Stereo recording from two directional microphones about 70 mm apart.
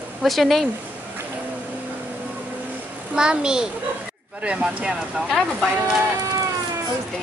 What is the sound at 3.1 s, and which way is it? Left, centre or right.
Speech, centre.